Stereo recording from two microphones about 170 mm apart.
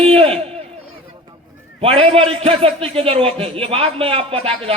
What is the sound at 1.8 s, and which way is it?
A man's voice, 35° right (ahead or behind).